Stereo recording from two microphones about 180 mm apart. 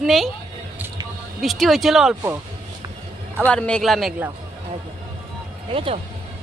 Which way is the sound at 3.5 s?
5° left (ahead or behind).